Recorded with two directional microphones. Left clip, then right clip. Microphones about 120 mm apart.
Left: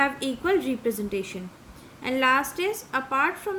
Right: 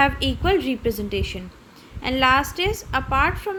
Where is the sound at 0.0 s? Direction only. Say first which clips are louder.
Right 5 dB; 30° right (ahead or behind).